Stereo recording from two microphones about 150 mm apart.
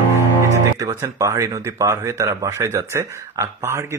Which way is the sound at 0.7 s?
20° right (ahead or behind).